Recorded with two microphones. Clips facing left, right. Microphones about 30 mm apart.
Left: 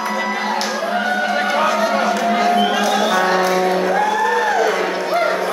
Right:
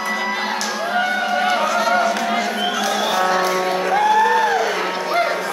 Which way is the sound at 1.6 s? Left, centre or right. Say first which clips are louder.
Left 1 dB; centre.